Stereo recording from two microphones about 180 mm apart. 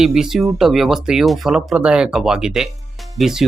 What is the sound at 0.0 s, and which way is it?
Speech, 5° right (ahead or behind).